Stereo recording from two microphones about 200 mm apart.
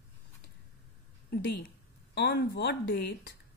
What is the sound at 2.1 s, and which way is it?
Speech, 55° left (ahead or behind).